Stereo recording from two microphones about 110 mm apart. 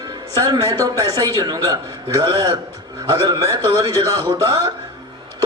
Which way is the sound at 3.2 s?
40° right (ahead or behind).